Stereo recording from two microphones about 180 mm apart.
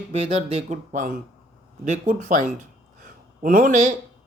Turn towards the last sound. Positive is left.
turn(degrees=-45)  # may be behind; listen again after turning